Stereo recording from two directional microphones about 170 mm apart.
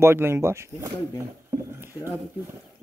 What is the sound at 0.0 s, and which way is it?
Speech, 15° right (ahead or behind).